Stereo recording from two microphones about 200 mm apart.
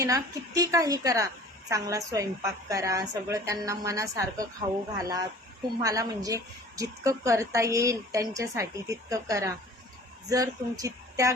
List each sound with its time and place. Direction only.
0.0 s a woman's voice: 15° right (ahead or behind)